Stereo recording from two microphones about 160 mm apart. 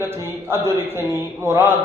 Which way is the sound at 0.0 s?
15° right (ahead or behind).